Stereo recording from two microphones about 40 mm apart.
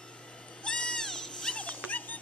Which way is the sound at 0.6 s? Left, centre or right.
Left.